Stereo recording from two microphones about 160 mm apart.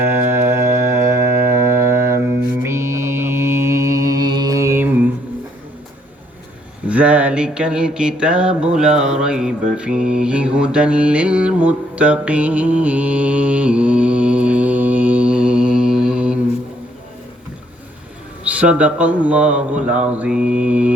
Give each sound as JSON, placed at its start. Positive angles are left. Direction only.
{"t": 0.1, "sound": "music", "side_deg": -15}
{"t": 2.6, "sound": "mantra", "side_deg": -15}
{"t": 6.8, "sound": "a sound", "side_deg": -10}
{"t": 18.4, "sound": "a man's voice", "side_deg": -10}